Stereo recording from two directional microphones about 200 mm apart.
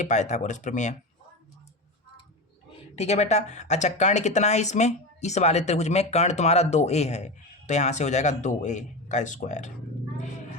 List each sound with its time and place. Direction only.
0.0 s speech: 35° left (ahead or behind)
2.9 s speech: 30° left (ahead or behind)